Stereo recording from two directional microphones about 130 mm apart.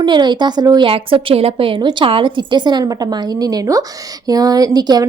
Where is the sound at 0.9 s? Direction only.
45° right (ahead or behind).